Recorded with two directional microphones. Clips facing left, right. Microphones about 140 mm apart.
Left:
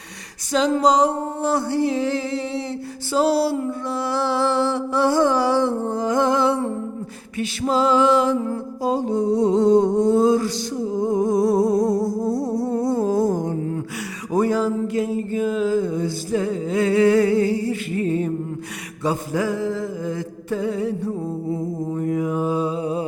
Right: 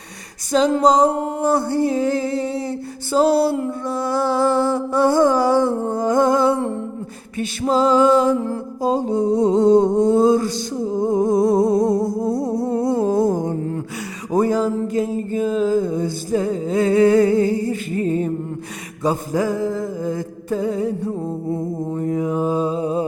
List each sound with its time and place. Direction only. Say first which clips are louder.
0.5 s music: right 2 dB; 45° right (ahead or behind)
9.1 s a sound: right 1 dB; 25° right (ahead or behind)
10.1 s music: right 2 dB; 45° right (ahead or behind)
10.8 s humming: right 2 dB; 25° right (ahead or behind)
12.3 s a sound: right 2 dB; 55° right (ahead or behind)
14.3 s music: right 2 dB; 40° right (ahead or behind)
21.9 s mantra: right 1 dB; 30° right (ahead or behind)